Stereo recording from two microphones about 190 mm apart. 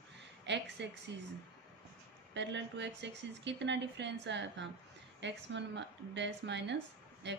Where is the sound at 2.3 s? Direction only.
65° right (ahead or behind).